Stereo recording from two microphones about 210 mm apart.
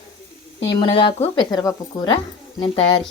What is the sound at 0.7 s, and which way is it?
Speech, 20° left (ahead or behind).